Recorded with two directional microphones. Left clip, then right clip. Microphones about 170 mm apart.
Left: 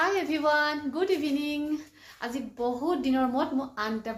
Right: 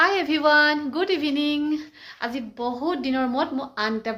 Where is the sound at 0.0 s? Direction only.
25° right (ahead or behind).